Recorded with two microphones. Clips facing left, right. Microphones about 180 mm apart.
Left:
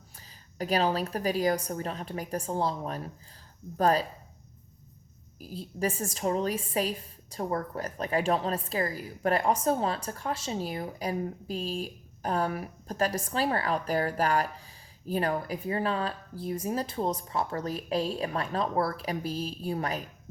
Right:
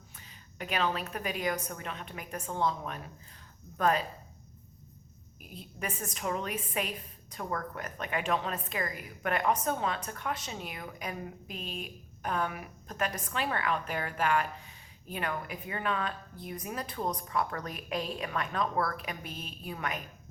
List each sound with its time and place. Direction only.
0.2 s a woman's voice: 35° left (ahead or behind)
5.4 s a woman's voice: 35° left (ahead or behind)